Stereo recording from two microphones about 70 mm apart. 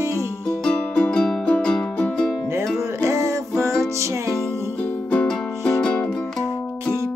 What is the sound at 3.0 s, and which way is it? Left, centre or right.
Music, right.